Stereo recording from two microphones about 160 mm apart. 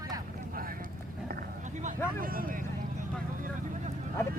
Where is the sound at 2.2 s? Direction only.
65° right (ahead or behind).